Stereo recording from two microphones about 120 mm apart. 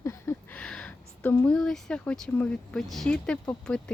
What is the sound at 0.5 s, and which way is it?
Speech, 10° left (ahead or behind).